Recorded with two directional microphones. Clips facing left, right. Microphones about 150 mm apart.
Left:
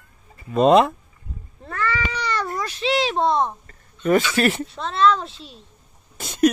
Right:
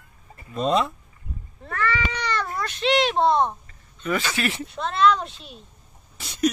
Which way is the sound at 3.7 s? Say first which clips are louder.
Left 8 dB; 45° left (ahead or behind).